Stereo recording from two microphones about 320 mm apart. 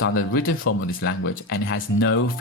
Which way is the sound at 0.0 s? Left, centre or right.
Left.